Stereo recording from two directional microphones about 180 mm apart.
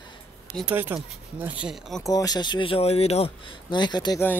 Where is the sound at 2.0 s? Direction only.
20° left (ahead or behind).